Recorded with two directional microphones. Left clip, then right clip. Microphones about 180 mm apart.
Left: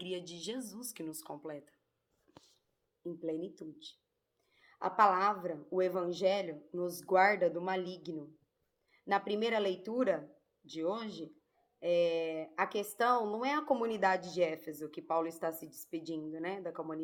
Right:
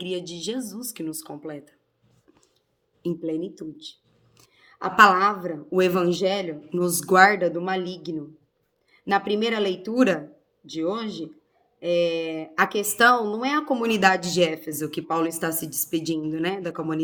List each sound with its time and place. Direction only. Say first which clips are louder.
0.0 s speech: right 11 dB; 20° right (ahead or behind)
3.2 s speech: right 10 dB; 20° right (ahead or behind)